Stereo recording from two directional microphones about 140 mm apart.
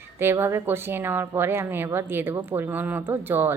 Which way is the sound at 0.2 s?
15° right (ahead or behind).